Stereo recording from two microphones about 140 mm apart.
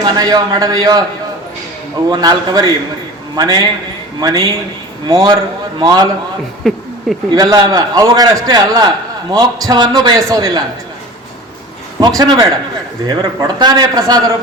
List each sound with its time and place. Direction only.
0.0 s a man's voice: 25° right (ahead or behind)
2.0 s a man's voice: 30° right (ahead or behind)
6.6 s speech: 5° left (ahead or behind)
7.3 s a man's voice: 30° right (ahead or behind)
11.9 s a man's voice: 30° right (ahead or behind)